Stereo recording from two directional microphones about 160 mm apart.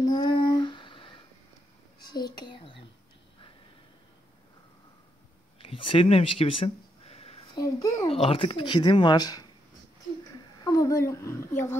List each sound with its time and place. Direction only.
0.0 s a sound: 25° left (ahead or behind)
2.0 s a child's voice: 25° left (ahead or behind)
5.6 s a sound: 35° left (ahead or behind)
7.5 s speech: 20° left (ahead or behind)
8.1 s speech: 35° left (ahead or behind)
10.6 s speech: 20° left (ahead or behind)